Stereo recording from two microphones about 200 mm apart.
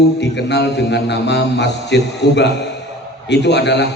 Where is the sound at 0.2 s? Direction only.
60° left (ahead or behind).